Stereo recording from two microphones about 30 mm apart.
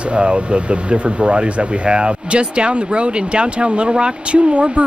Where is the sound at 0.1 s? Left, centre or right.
Right.